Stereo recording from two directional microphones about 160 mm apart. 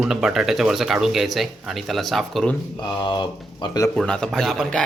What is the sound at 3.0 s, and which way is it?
Speech, 30° left (ahead or behind).